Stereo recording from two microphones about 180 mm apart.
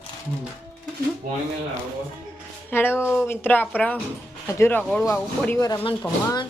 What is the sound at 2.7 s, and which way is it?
Speech, 10° left (ahead or behind).